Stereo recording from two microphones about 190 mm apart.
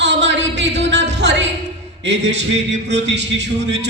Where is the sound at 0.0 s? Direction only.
65° right (ahead or behind).